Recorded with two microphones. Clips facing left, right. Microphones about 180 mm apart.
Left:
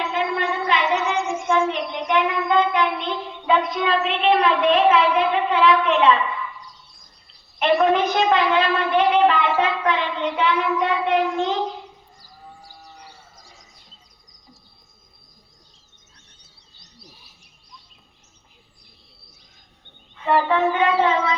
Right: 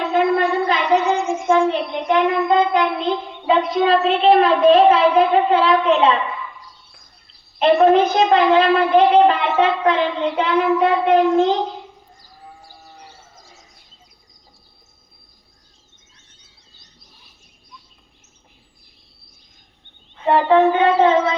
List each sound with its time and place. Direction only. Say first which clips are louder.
0.1 s a sound: right 7 dB; 40° right (ahead or behind)
1.2 s child singing: right 4 dB; centre (ahead or behind)
1.5 s child singing: right 6 dB; 35° right (ahead or behind)
7.6 s speech: right 5 dB; 35° right (ahead or behind)
20.1 s child singing: right 5 dB; 30° right (ahead or behind)